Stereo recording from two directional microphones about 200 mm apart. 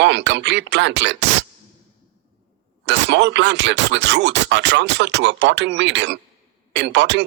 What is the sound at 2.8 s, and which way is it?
Speech, 60° right (ahead or behind).